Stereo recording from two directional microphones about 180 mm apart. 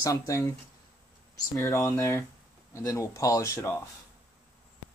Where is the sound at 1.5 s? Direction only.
20° left (ahead or behind).